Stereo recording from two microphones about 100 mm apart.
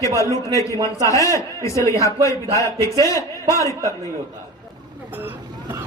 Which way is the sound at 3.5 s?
30° left (ahead or behind).